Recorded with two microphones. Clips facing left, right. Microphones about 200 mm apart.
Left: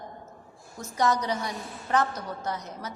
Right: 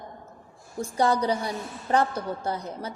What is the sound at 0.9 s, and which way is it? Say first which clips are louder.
A woman's voice: right 3 dB; 30° right (ahead or behind).